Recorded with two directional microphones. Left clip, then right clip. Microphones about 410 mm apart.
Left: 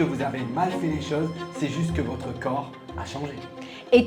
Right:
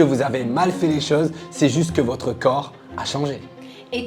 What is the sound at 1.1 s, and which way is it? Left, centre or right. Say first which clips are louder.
Speech: right 8 dB; right.